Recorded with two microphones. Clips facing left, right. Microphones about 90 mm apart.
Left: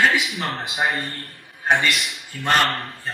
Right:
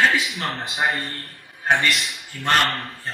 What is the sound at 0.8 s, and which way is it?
Speech, 35° left (ahead or behind).